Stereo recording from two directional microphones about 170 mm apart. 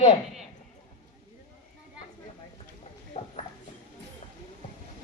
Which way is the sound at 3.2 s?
40° left (ahead or behind).